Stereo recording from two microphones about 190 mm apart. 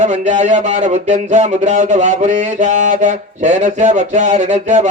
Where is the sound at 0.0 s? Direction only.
40° right (ahead or behind).